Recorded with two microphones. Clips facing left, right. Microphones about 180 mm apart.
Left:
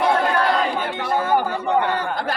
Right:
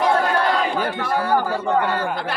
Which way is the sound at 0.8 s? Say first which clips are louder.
Even; 20° left (ahead or behind).